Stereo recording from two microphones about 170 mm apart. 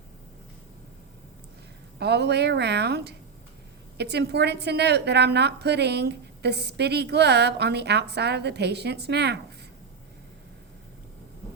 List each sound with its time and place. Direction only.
2.0 s a woman's voice: 80° right